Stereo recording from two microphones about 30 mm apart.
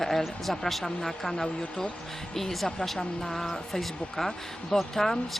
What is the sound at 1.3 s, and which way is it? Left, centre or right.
Speech, left.